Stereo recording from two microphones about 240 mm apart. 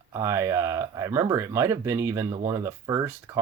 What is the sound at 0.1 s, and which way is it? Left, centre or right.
Speech, centre.